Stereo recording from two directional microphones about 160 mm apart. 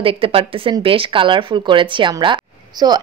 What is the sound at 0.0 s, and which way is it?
A woman's voice, 35° right (ahead or behind).